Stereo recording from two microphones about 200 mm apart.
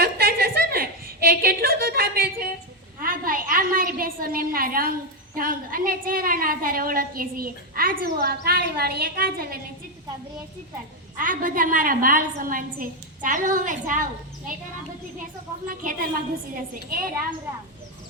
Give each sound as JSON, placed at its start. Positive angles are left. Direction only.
{"t": 0.0, "sound": "a sound", "side_deg": -50}
{"t": 3.0, "sound": "a woman's voice", "side_deg": -45}
{"t": 11.2, "sound": "a woman's voice", "side_deg": -40}
{"t": 15.2, "sound": "a woman's voice", "side_deg": -45}